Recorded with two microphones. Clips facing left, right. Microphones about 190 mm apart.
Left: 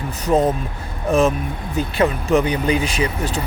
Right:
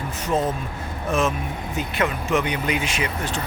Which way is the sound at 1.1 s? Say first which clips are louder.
Left 6 dB; 35° left (ahead or behind).